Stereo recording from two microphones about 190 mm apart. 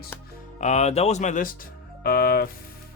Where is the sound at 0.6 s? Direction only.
35° left (ahead or behind).